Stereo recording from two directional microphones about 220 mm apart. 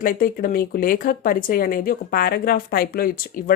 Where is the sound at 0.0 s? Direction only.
40° left (ahead or behind).